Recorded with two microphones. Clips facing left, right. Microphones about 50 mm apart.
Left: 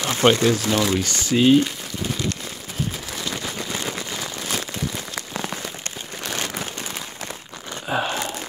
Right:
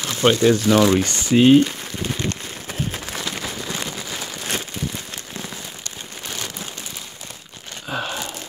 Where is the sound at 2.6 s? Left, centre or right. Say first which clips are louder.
Right 1 dB; right.